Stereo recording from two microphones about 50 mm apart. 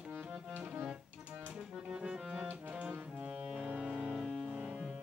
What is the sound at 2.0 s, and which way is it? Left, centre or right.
Music, centre.